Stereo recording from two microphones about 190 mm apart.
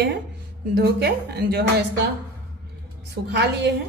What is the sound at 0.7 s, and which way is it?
A woman's voice, 60° right (ahead or behind).